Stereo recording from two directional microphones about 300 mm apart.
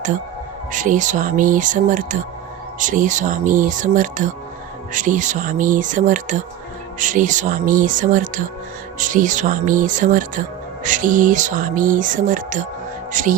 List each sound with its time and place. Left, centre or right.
0.7 s speech: right